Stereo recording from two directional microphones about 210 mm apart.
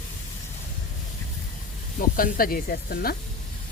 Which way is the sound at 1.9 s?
40° left (ahead or behind).